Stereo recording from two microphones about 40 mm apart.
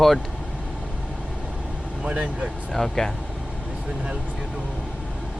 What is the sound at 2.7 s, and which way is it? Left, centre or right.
Speech, centre.